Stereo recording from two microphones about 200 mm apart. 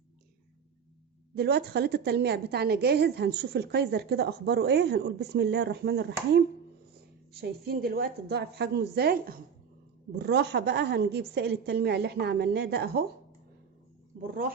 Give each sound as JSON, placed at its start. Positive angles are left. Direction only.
{"t": 1.4, "sound": "a woman's voice", "side_deg": -55}
{"t": 7.4, "sound": "a woman's voice", "side_deg": -50}
{"t": 14.2, "sound": "a woman's voice", "side_deg": -45}